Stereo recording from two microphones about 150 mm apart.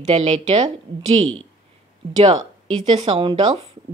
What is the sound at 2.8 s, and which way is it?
Speech, 35° right (ahead or behind).